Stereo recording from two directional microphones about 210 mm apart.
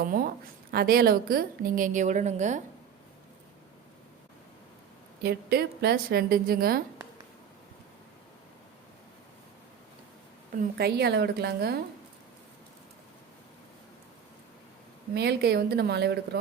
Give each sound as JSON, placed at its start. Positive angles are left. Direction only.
{"t": 0.0, "sound": "a woman's voice", "side_deg": -45}
{"t": 5.2, "sound": "a woman's voice", "side_deg": -50}
{"t": 10.6, "sound": "a woman's voice", "side_deg": -50}
{"t": 15.1, "sound": "a woman's voice", "side_deg": -50}